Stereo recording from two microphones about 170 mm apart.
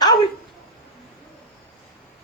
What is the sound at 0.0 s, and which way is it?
Dog, 25° left (ahead or behind).